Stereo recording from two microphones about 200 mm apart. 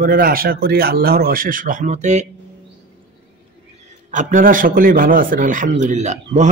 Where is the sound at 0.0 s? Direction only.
45° right (ahead or behind).